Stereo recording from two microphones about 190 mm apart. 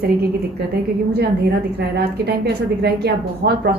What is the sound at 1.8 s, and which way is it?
A woman's voice, 60° right (ahead or behind).